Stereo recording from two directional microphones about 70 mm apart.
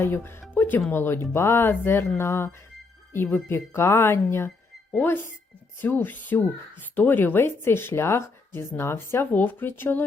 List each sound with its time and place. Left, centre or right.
0.0 s speech: left